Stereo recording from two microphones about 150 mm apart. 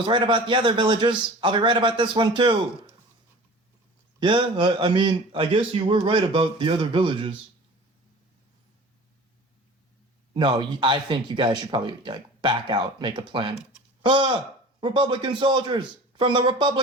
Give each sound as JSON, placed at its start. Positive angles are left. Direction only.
{"t": 0.0, "sound": "a man's voice", "side_deg": -35}
{"t": 4.2, "sound": "a man's voice", "side_deg": -30}
{"t": 10.3, "sound": "a man's voice", "side_deg": -30}